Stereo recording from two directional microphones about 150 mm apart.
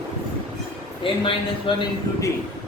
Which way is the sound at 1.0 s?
35° left (ahead or behind).